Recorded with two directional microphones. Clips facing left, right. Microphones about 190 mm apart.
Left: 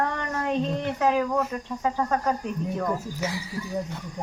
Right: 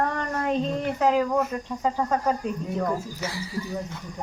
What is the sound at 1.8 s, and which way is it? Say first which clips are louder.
Cricket: right 1 dB; 20° right (ahead or behind).